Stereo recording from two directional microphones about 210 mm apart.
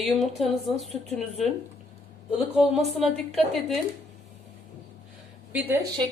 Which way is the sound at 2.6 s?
Centre (ahead or behind).